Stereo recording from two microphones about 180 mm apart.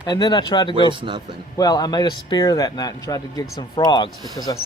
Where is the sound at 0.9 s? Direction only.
25° right (ahead or behind).